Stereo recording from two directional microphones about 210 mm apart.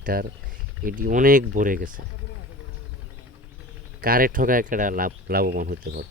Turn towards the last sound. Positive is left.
turn(degrees=-45)  # may be behind; listen again after turning